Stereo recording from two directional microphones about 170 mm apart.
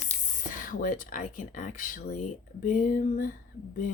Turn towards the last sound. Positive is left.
turn(degrees=50)  # may be behind; listen again after turning